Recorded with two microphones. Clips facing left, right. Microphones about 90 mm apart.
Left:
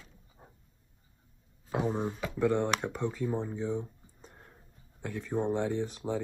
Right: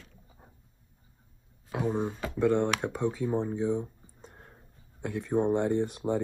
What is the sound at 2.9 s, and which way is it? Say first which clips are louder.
Speech: right 3 dB; 5° right (ahead or behind).